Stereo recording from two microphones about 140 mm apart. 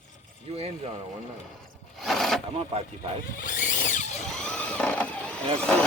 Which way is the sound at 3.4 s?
70° left (ahead or behind).